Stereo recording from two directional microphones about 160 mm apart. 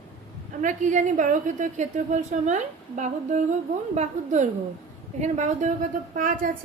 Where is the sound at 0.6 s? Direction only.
50° right (ahead or behind).